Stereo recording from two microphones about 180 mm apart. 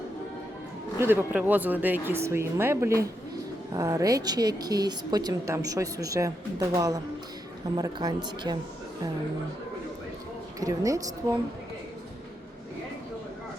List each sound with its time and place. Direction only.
0.9 s a woman's voice: 10° right (ahead or behind)
10.6 s a woman's voice: 20° right (ahead or behind)